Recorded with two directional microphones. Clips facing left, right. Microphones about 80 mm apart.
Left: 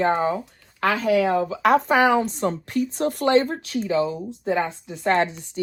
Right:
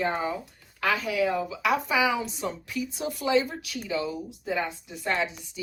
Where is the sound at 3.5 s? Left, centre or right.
Left.